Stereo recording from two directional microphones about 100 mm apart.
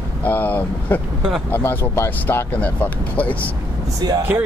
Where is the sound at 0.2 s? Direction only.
15° left (ahead or behind).